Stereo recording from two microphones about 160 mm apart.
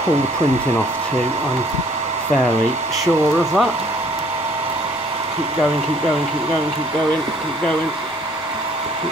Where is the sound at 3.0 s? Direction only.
Centre (ahead or behind).